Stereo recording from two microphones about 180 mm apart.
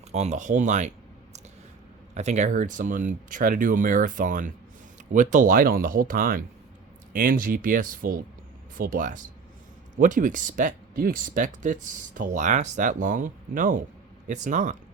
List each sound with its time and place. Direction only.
0.1 s speech: 40° right (ahead or behind)